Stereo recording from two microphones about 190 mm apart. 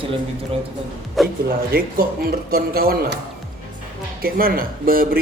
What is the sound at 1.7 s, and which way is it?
Speech, 50° right (ahead or behind).